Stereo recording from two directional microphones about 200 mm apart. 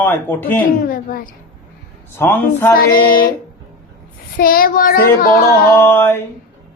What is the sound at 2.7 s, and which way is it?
Speech, 45° left (ahead or behind).